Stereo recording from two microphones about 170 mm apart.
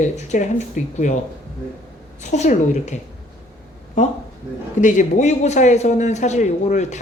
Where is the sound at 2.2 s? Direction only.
40° left (ahead or behind).